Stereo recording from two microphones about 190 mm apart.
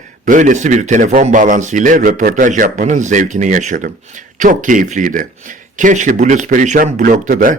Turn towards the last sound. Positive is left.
turn(degrees=-45)  # may be behind; listen again after turning